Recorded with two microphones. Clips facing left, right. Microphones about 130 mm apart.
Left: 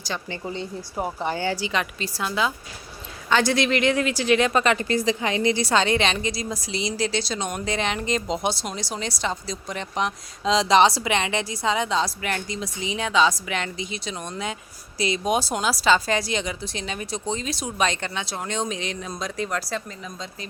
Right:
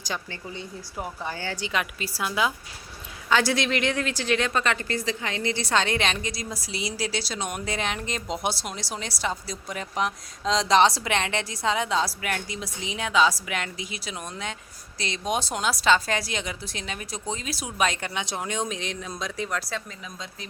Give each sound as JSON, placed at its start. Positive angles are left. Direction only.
{"t": 0.4, "sound": "speech", "side_deg": 40}
{"t": 1.2, "sound": "speech", "side_deg": 20}
{"t": 1.5, "sound": "a woman's voice", "side_deg": 0}
{"t": 5.7, "sound": "speech", "side_deg": 0}
{"t": 14.9, "sound": "speech", "side_deg": 5}
{"t": 18.1, "sound": "speech", "side_deg": -15}